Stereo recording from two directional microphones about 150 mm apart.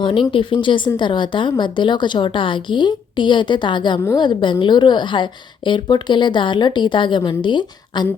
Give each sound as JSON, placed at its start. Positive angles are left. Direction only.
{"t": 0.0, "sound": "a woman's voice", "side_deg": 35}